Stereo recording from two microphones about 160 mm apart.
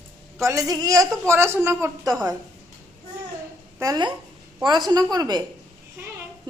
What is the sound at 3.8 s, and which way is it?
A woman's voice, 25° right (ahead or behind).